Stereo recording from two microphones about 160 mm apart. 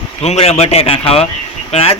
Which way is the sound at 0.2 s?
40° left (ahead or behind).